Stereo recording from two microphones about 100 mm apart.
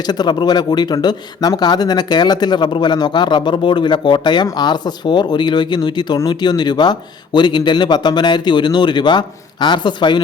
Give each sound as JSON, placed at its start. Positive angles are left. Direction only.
{"t": 0.1, "sound": "speech", "side_deg": 45}